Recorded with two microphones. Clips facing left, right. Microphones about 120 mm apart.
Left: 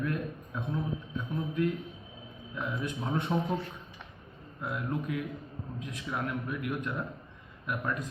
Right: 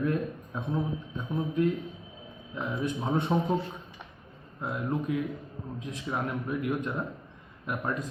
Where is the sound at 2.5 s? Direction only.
25° right (ahead or behind).